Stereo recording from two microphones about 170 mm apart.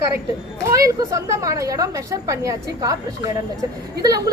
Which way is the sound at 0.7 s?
20° right (ahead or behind).